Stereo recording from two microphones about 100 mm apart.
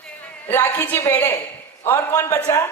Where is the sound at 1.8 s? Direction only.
30° left (ahead or behind).